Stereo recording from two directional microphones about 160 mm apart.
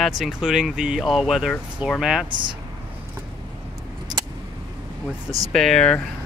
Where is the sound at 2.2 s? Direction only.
30° right (ahead or behind).